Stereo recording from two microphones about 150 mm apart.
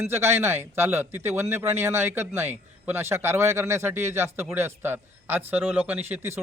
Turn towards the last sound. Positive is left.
turn(degrees=-15)  # may be behind; listen again after turning